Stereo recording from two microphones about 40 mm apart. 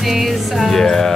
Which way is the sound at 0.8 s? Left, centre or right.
Centre.